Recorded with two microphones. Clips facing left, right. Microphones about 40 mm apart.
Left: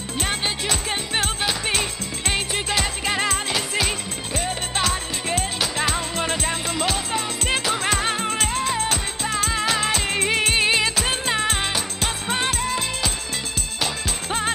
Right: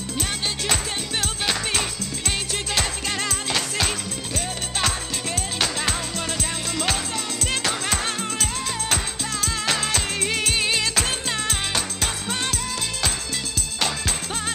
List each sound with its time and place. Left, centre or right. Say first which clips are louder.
2.2 s music: left 4 dB; left
3.5 s music: left 1 dB; centre
4.3 s music: left 5 dB; left
6.1 s music: left 4 dB; left